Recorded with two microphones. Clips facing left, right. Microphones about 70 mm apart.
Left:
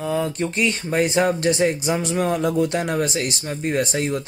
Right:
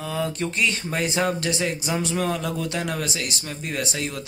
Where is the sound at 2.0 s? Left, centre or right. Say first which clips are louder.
Left 6 dB; left.